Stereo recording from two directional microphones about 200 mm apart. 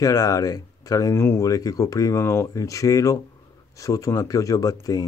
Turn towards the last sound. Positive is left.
turn(degrees=15)  # may be behind; listen again after turning